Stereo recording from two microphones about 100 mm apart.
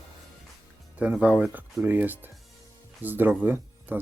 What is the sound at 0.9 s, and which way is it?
Speech, 10° right (ahead or behind).